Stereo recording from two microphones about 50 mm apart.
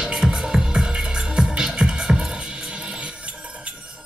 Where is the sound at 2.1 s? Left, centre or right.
Centre.